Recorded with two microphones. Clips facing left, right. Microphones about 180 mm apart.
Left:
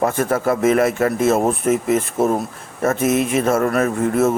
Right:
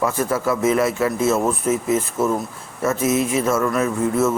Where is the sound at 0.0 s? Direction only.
55° left (ahead or behind).